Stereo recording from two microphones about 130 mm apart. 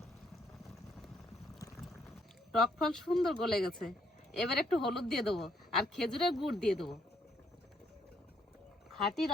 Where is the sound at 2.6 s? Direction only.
5° left (ahead or behind).